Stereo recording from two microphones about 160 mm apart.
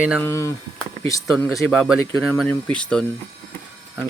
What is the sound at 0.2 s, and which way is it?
Speech, 15° left (ahead or behind).